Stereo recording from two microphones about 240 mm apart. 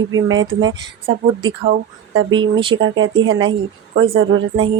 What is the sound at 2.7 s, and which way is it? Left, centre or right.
Speech, right.